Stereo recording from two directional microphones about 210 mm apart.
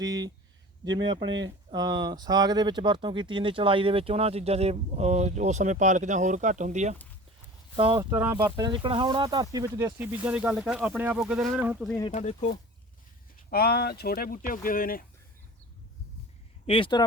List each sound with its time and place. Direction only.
0.0 s speech: 20° right (ahead or behind)
1.3 s speech: 60° right (ahead or behind)
1.7 s speech: 20° right (ahead or behind); by 6.9 s 35° right (ahead or behind)
7.8 s speech: 25° right (ahead or behind)
8.1 s speech: 10° right (ahead or behind)
12.1 s speech: 35° left (ahead or behind)
13.5 s speech: 50° left (ahead or behind)
16.6 s speech: 25° left (ahead or behind)